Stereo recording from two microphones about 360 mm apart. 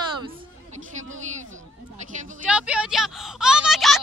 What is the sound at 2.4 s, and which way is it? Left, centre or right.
Speech, centre.